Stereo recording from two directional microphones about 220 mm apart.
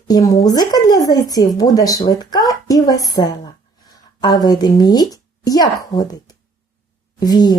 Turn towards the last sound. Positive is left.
turn(degrees=20)  # may be behind; listen again after turning